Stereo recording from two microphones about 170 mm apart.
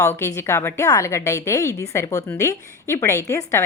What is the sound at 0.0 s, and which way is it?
A woman's voice, 15° left (ahead or behind).